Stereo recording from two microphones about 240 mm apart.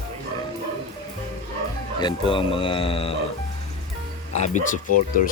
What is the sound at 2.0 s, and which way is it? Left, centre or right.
Speech, centre.